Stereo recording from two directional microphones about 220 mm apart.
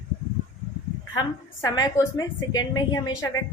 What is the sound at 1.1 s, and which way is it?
A woman's voice, 15° left (ahead or behind).